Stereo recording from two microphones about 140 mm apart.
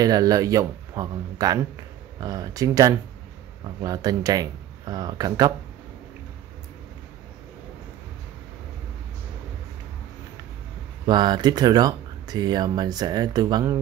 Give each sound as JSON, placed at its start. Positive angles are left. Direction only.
{"t": 0.0, "sound": "speech", "side_deg": -25}
{"t": 11.1, "sound": "speech", "side_deg": -30}